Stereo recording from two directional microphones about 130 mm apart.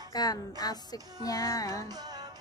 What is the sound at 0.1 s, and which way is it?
Music, 30° left (ahead or behind).